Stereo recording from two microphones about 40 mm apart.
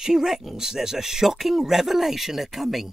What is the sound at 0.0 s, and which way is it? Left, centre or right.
Speech, centre.